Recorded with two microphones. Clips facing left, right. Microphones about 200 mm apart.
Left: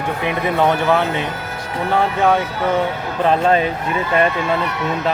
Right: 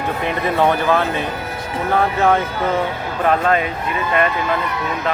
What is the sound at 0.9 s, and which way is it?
Speech, 15° left (ahead or behind).